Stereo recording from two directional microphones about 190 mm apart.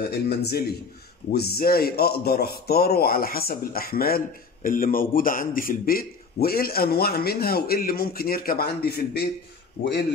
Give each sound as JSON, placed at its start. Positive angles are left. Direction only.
{"t": 0.1, "sound": "a man's voice", "side_deg": 55}